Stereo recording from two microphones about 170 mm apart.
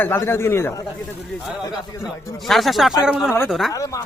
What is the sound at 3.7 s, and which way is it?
Speech, 20° left (ahead or behind).